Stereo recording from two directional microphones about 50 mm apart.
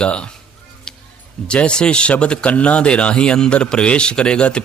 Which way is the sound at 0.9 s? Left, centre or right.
Centre.